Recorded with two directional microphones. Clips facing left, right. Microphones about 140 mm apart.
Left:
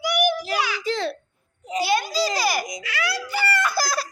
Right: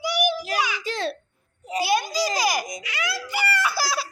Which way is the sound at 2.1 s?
15° right (ahead or behind).